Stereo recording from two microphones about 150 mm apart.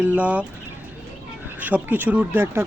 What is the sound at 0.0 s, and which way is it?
Speech, 10° right (ahead or behind).